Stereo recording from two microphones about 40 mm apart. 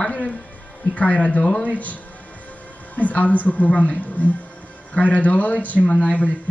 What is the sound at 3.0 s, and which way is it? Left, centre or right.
A woman's voice, left.